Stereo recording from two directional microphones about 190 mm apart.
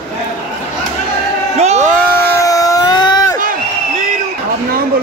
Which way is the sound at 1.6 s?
35° right (ahead or behind).